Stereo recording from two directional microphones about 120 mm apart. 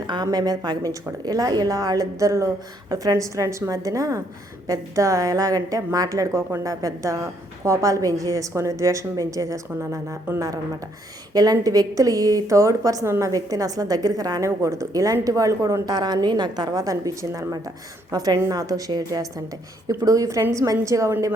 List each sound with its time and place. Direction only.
0.1 s a woman's voice: 35° right (ahead or behind)